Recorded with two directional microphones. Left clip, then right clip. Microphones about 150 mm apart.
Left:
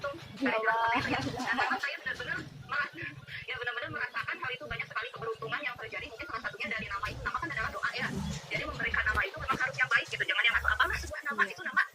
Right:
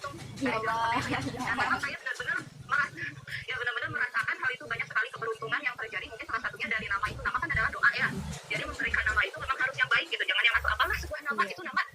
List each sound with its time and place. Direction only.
0.4 s speech: centre (ahead or behind)
3.5 s gargling: centre (ahead or behind)
8.8 s music: 25° right (ahead or behind); by 11.9 s 45° right (ahead or behind)